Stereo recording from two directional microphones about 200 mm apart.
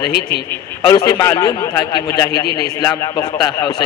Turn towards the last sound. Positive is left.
turn(degrees=20)  # may be behind; listen again after turning